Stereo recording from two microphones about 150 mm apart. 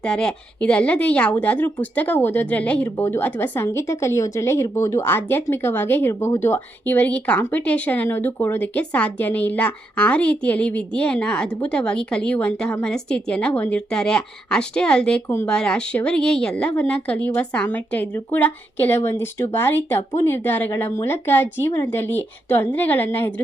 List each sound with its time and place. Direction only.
0.0 s a woman's voice: 5° left (ahead or behind)